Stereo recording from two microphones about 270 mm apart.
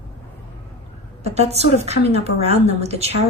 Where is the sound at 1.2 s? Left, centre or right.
Right.